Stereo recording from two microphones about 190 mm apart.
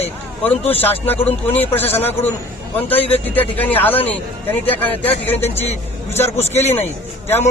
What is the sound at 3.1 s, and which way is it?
A man's voice, 10° left (ahead or behind).